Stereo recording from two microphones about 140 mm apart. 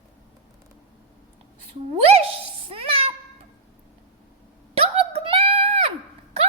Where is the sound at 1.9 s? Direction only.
45° right (ahead or behind).